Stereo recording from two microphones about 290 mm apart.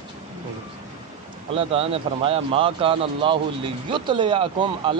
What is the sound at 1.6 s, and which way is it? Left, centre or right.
A man's voice, centre.